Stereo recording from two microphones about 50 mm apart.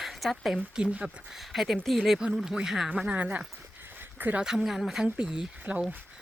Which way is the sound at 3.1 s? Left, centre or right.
Right.